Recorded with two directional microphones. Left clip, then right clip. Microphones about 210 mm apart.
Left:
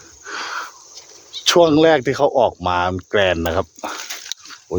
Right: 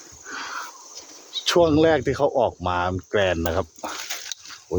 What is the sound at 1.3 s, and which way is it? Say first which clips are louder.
Speech: left 5 dB; 40° left (ahead or behind).